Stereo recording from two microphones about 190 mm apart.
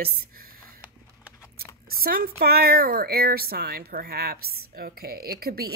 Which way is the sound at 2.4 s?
55° right (ahead or behind).